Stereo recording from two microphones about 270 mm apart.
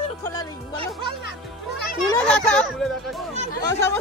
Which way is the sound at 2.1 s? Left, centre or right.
Centre.